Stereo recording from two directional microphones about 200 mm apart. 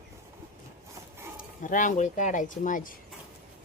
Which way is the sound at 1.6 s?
40° left (ahead or behind).